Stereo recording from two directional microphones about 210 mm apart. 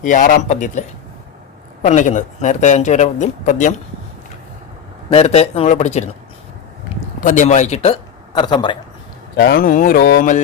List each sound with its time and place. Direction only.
0.0 s speech: 40° left (ahead or behind)
5.0 s speech: 30° left (ahead or behind)
7.2 s speech: 40° left (ahead or behind); by 8.8 s 20° left (ahead or behind)
9.3 s speech: 50° left (ahead or behind)